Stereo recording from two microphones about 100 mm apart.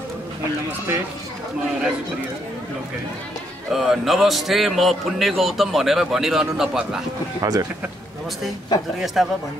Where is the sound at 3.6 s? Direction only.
Centre (ahead or behind).